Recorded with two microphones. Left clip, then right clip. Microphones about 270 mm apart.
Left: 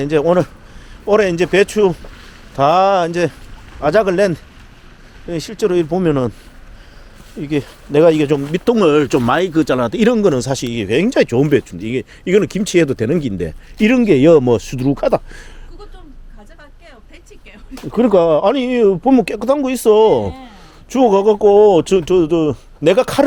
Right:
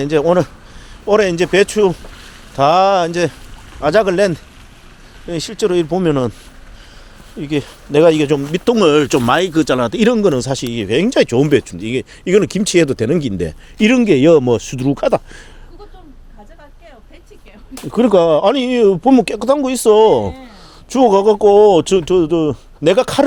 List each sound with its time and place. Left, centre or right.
0.0 s speech: centre
7.3 s speech: centre
17.7 s speech: centre
21.0 s a sound: right
21.5 s speech: centre